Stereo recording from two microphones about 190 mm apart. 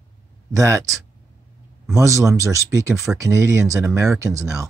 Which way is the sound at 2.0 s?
15° right (ahead or behind).